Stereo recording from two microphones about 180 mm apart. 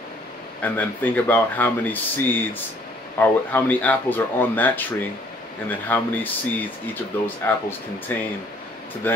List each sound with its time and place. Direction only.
0.6 s speech: 10° left (ahead or behind)